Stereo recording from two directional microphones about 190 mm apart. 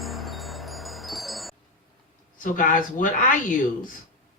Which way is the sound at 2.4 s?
45° left (ahead or behind).